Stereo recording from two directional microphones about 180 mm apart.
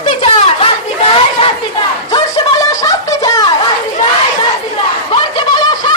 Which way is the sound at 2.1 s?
20° left (ahead or behind).